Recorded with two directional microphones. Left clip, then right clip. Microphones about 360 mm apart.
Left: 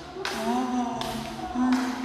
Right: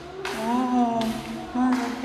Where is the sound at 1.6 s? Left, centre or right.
Centre.